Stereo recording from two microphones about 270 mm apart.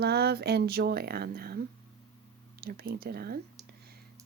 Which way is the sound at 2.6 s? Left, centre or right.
Right.